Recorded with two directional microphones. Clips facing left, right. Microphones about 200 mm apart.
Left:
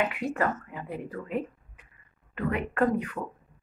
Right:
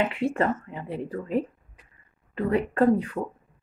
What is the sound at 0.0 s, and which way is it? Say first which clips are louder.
A woman's voice: right 3 dB; 30° right (ahead or behind).